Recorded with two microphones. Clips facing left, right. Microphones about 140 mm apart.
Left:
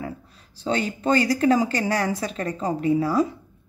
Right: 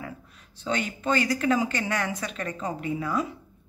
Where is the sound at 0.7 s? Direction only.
35° left (ahead or behind).